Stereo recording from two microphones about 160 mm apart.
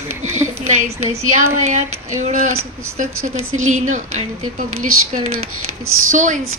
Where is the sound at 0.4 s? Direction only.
45° right (ahead or behind).